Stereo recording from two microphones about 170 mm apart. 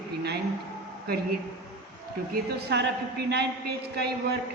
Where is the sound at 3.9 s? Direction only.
75° right (ahead or behind).